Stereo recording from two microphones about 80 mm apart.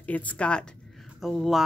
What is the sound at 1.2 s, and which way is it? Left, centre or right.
Speech, centre.